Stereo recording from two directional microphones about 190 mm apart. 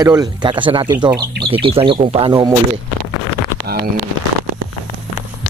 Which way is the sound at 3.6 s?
55° right (ahead or behind).